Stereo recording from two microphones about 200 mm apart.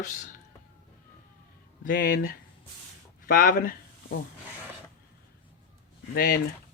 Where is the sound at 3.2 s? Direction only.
45° left (ahead or behind).